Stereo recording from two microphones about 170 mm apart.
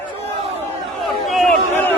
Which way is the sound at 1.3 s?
Centre (ahead or behind).